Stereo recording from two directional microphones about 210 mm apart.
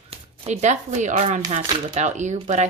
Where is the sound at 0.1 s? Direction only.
30° right (ahead or behind).